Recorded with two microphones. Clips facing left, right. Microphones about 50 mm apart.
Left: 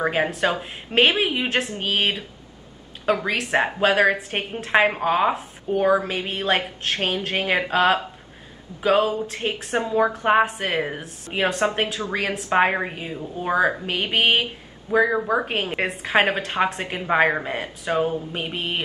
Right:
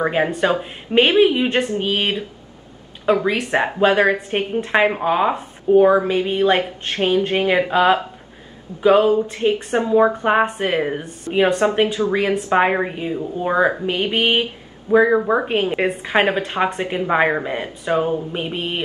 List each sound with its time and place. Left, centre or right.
0.0 s speech: centre
4.3 s a woman's voice: centre
7.0 s speech: right
7.4 s speech: centre
9.8 s a man's voice: centre
10.1 s a man's voice: centre
14.9 s a man's voice: centre